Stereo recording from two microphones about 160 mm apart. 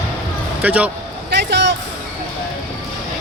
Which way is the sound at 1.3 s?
90° right.